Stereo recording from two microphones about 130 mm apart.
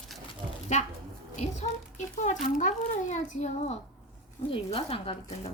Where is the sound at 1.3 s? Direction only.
65° left (ahead or behind).